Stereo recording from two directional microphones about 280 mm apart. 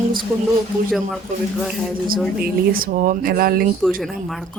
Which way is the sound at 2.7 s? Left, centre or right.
Right.